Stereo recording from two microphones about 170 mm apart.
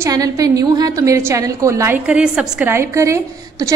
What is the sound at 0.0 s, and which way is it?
A woman's voice, 20° right (ahead or behind).